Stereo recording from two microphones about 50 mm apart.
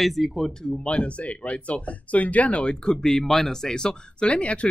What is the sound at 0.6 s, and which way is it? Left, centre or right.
Speech, centre.